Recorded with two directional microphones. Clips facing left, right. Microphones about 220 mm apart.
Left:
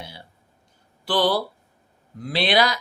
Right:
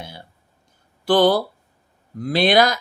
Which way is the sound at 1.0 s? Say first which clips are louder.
Right 6 dB; 45° right (ahead or behind).